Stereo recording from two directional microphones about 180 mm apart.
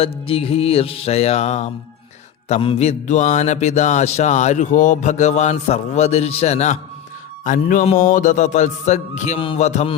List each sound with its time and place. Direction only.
0.0 s speech: 30° left (ahead or behind)